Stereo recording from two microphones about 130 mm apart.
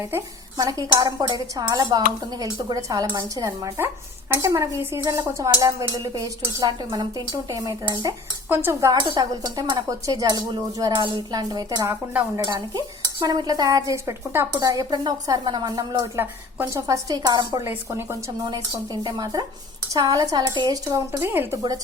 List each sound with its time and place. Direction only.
0.5 s speech: 30° right (ahead or behind)
1.7 s stir: 30° right (ahead or behind)
2.4 s speech: 30° right (ahead or behind)
8.4 s dishes: 15° right (ahead or behind)
8.9 s stir: 30° right (ahead or behind)
16.1 s speech: 20° right (ahead or behind)
16.8 s stir: 30° right (ahead or behind)
17.6 s speech: 20° right (ahead or behind)
19.0 s stir: 30° right (ahead or behind)
19.9 s speech: 25° right (ahead or behind)